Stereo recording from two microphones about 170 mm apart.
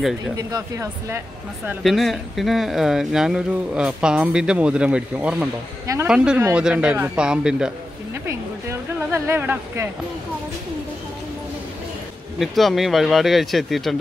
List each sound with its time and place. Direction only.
0.4 s speech: 20° right (ahead or behind)
1.8 s speech: centre (ahead or behind)
8.3 s a sound: 15° right (ahead or behind)
12.4 s speech: centre (ahead or behind)